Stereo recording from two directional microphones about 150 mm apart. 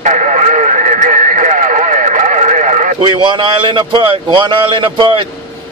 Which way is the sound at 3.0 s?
30° right (ahead or behind).